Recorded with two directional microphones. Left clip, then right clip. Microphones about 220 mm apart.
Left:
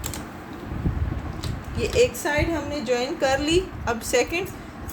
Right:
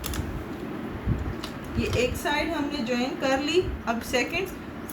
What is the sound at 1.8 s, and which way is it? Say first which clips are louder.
A woman's voice: left 6 dB; 50° left (ahead or behind).